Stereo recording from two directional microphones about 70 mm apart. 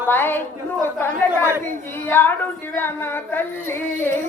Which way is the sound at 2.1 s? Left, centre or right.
Left.